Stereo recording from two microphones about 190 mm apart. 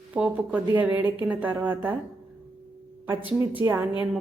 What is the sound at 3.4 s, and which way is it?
Speech, 10° right (ahead or behind).